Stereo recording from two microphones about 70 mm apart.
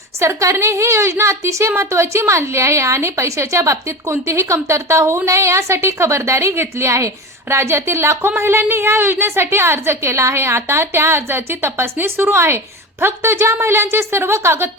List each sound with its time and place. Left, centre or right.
0.2 s a woman's voice: right